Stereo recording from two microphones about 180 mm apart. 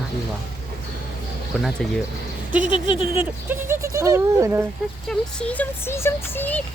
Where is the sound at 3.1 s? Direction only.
10° right (ahead or behind).